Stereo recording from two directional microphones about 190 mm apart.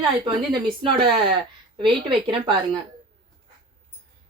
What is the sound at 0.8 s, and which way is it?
Speech, 25° right (ahead or behind).